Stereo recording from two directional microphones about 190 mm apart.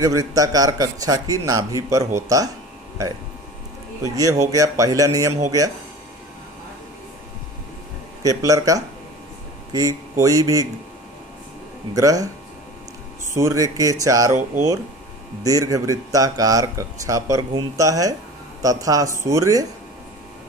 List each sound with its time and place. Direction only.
0.0 s a man's voice: 15° right (ahead or behind)
4.0 s speech: 15° right (ahead or behind)
8.2 s speech: 15° right (ahead or behind)
11.9 s speech: 20° right (ahead or behind)
13.3 s speech: 15° right (ahead or behind)
15.4 s a man's voice: 20° right (ahead or behind)